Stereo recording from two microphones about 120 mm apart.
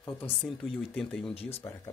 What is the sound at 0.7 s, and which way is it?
Speech, 5° left (ahead or behind).